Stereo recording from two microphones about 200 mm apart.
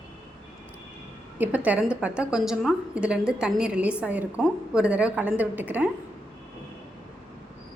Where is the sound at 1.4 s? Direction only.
10° right (ahead or behind).